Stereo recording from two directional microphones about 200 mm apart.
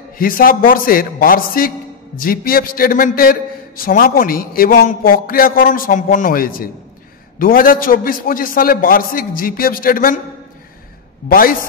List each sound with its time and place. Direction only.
0.2 s a man's voice: 45° left (ahead or behind)
11.2 s a man's voice: 45° left (ahead or behind)